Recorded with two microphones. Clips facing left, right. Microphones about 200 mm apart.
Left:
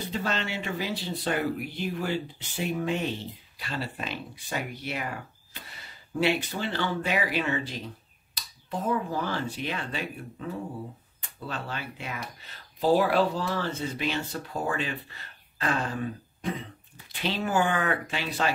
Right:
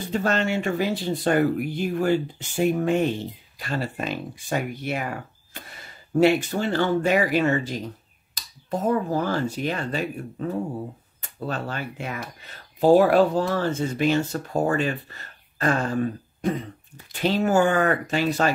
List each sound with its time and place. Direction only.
0.1 s speech: 50° right (ahead or behind)
5.5 s a sound: 50° right (ahead or behind)
6.1 s speech: 45° right (ahead or behind)